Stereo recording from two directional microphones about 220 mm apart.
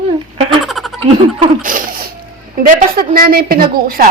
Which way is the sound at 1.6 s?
40° right (ahead or behind).